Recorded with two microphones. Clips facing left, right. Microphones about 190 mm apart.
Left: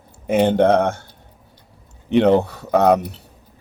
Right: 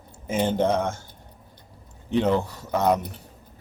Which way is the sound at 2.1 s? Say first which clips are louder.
Left 8 dB; 65° left (ahead or behind).